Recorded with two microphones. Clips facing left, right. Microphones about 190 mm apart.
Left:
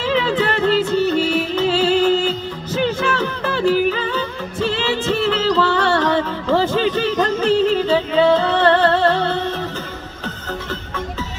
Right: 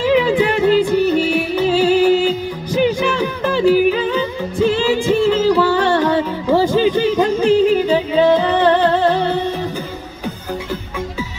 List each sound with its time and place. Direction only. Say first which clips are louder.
0.0 s music: right 5 dB; 10° right (ahead or behind)